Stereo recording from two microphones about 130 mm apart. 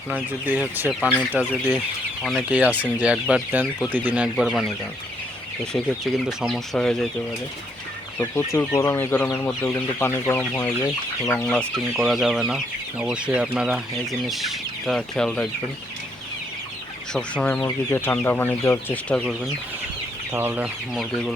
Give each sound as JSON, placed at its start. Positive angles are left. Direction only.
{"t": 0.1, "sound": "speech", "side_deg": -10}
{"t": 6.2, "sound": "speech", "side_deg": -5}
{"t": 6.7, "sound": "speech", "side_deg": 5}
{"t": 8.2, "sound": "speech", "side_deg": 15}
{"t": 11.4, "sound": "speech", "side_deg": 5}
{"t": 17.2, "sound": "speech", "side_deg": 10}
{"t": 20.3, "sound": "speech", "side_deg": -15}
{"t": 20.9, "sound": "speech", "side_deg": 0}